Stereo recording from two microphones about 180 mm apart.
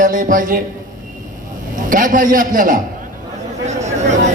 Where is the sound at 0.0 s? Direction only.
50° right (ahead or behind).